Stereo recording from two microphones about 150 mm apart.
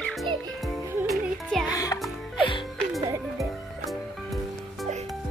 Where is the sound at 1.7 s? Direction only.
25° left (ahead or behind).